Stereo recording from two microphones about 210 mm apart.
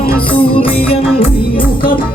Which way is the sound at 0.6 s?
25° left (ahead or behind).